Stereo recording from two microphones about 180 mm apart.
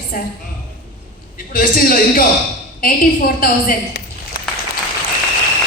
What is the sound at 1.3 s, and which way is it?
Speech, 50° left (ahead or behind).